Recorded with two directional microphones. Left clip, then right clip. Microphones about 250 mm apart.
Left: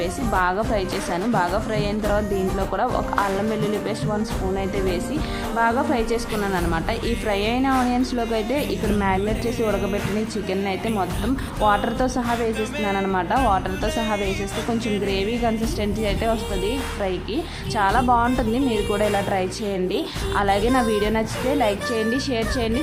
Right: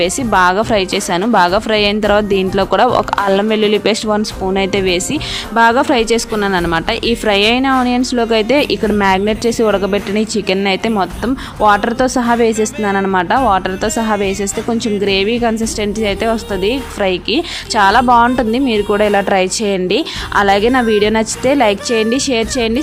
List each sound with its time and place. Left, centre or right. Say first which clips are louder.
0.0 s a woman's voice: right 10 dB; right